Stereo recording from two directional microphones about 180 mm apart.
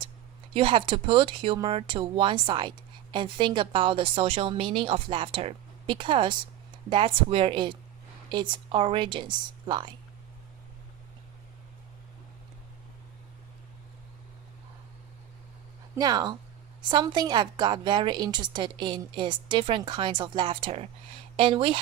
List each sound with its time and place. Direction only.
0.5 s a woman's voice: 30° right (ahead or behind)
16.0 s a woman's voice: 20° right (ahead or behind)